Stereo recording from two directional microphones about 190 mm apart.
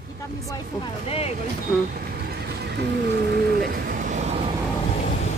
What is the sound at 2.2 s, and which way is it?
Vehicle, 60° right (ahead or behind).